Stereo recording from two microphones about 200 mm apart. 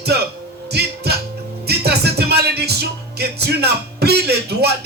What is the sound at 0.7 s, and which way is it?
Speech, 55° right (ahead or behind).